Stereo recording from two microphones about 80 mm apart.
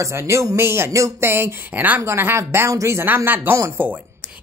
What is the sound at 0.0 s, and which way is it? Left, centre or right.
Speech, right.